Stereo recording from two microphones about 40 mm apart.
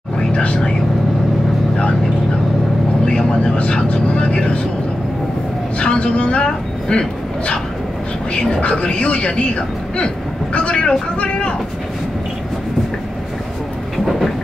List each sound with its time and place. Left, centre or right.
0.3 s a sound: left
3.1 s speech: left
5.8 s speech: left